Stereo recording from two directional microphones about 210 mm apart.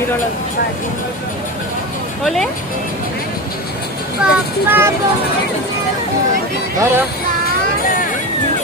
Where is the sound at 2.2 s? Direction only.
Centre (ahead or behind).